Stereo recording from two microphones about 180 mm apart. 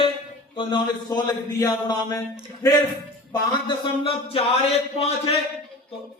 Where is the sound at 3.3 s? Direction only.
30° left (ahead or behind).